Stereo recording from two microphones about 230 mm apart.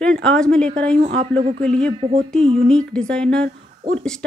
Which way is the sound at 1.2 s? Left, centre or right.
Right.